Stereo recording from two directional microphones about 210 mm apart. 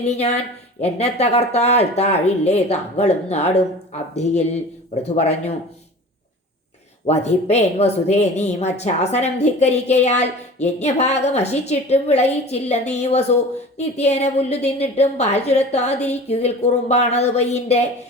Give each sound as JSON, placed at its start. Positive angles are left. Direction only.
{"t": 0.0, "sound": "speech", "side_deg": 30}
{"t": 7.0, "sound": "speech", "side_deg": 30}